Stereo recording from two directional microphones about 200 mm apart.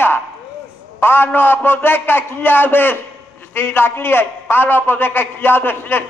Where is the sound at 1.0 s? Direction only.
10° left (ahead or behind).